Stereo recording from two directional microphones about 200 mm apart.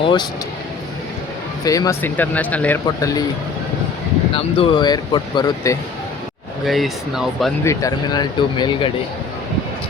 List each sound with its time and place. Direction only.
0.0 s speech: 20° left (ahead or behind)
1.6 s speech: 15° left (ahead or behind)
4.4 s speech: 25° left (ahead or behind)
6.7 s speech: centre (ahead or behind)
7.6 s speech: 15° left (ahead or behind)